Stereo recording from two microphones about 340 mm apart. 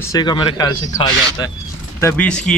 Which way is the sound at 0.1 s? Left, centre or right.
Centre.